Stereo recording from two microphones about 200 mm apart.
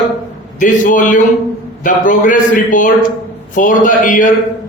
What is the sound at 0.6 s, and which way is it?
A man's voice, 40° left (ahead or behind).